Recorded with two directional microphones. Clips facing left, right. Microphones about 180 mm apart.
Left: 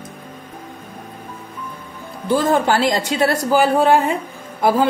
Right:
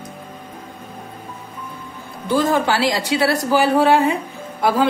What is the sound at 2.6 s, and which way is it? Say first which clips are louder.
A woman's voice: left 2 dB; 50° left (ahead or behind).